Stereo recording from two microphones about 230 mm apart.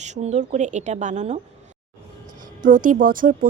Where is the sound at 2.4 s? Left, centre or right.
Right.